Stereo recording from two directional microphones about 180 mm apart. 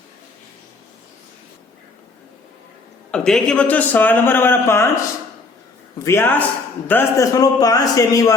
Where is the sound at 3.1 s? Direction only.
5° left (ahead or behind).